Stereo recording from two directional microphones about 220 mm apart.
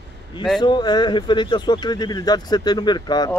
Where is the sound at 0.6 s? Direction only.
20° left (ahead or behind).